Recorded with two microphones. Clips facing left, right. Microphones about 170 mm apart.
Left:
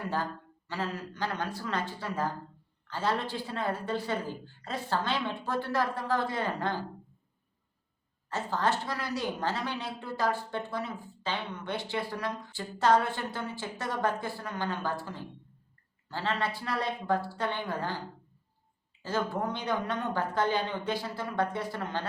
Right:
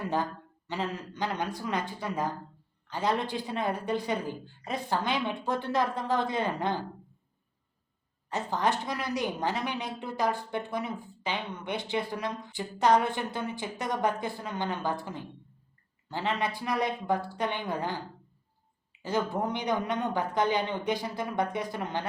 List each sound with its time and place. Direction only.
0.7 s a woman's voice: 20° right (ahead or behind)
8.3 s a woman's voice: 15° right (ahead or behind)
19.0 s a woman's voice: 15° right (ahead or behind)